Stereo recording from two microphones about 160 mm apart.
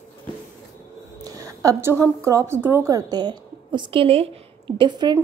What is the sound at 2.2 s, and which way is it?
Speech, 20° right (ahead or behind).